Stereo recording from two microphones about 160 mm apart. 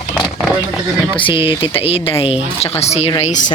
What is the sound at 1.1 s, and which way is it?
Speech, 30° left (ahead or behind).